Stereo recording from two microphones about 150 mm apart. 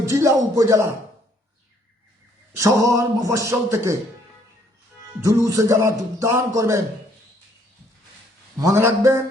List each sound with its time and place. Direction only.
0.0 s music: 20° right (ahead or behind)
2.6 s music: 20° right (ahead or behind)
5.2 s music: 20° right (ahead or behind)
8.5 s music: 20° right (ahead or behind)